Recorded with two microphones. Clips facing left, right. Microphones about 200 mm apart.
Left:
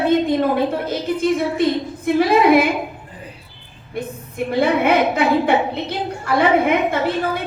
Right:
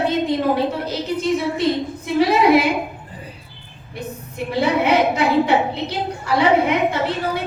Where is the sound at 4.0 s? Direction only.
55° left (ahead or behind).